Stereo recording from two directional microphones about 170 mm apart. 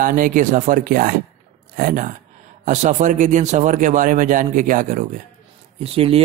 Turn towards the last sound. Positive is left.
turn(degrees=-35)  # may be behind; listen again after turning